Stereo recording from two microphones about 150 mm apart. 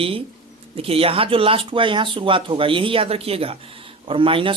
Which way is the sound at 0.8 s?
40° right (ahead or behind).